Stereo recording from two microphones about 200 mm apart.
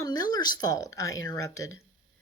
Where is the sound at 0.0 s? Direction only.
20° left (ahead or behind).